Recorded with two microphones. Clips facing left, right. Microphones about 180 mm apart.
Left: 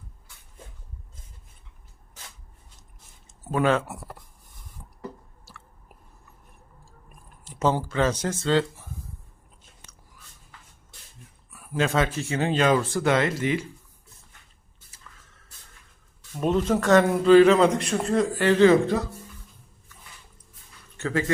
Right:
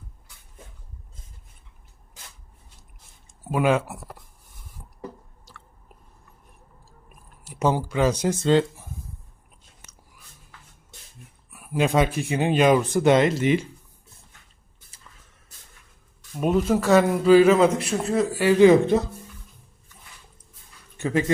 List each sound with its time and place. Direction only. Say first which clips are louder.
3.5 s a man's voice: right 1 dB; 10° right (ahead or behind)
7.1 s speech: right 2 dB; 10° right (ahead or behind)
11.5 s a man's voice: right 3 dB; 15° right (ahead or behind)
16.4 s a man's voice: right 2 dB; 10° right (ahead or behind)
21.0 s speech: right 3 dB; 20° right (ahead or behind)